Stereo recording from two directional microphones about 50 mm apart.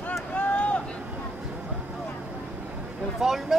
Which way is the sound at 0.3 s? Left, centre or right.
Left.